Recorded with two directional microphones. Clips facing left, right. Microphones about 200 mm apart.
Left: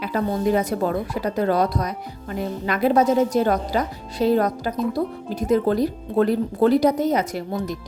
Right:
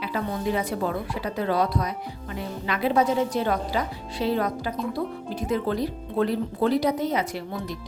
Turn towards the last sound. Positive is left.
turn(degrees=45)  # may be behind; listen again after turning